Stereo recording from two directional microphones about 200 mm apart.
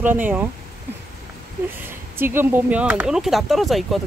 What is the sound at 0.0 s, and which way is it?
Speech, 10° right (ahead or behind).